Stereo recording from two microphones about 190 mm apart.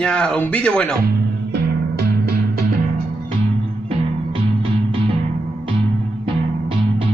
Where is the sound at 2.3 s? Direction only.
55° right (ahead or behind).